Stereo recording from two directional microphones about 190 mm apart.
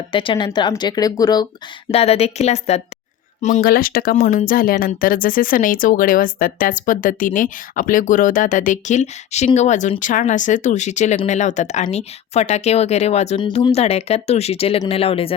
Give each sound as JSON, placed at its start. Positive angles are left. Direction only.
{"t": 0.1, "sound": "speech", "side_deg": 25}
{"t": 1.9, "sound": "speech", "side_deg": 30}
{"t": 3.4, "sound": "speech", "side_deg": 45}